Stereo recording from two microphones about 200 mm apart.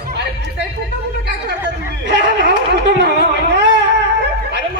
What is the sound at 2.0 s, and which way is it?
Speech, 60° right (ahead or behind).